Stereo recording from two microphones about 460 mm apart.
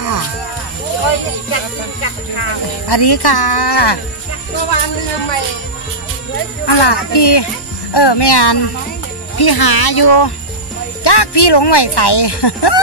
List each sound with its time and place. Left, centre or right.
1.0 s music: left
2.9 s speech: left
6.7 s speech: left